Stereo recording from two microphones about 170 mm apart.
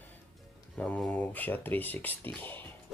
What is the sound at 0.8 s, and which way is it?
Speech, 5° left (ahead or behind).